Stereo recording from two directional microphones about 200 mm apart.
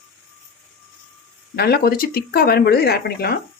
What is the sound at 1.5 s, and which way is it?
Speech, 50° left (ahead or behind).